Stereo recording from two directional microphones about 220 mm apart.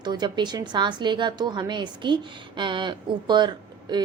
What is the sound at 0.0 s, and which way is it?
A woman's voice, 20° right (ahead or behind).